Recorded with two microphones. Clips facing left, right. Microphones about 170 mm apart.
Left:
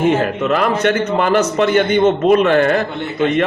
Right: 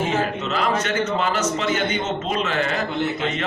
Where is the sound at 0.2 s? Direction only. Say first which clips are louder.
Left 7 dB; 60° left (ahead or behind).